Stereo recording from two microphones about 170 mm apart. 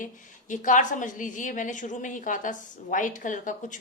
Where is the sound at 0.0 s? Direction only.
50° left (ahead or behind).